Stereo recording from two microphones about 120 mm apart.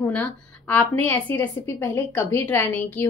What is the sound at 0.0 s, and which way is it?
A woman's voice, 10° left (ahead or behind).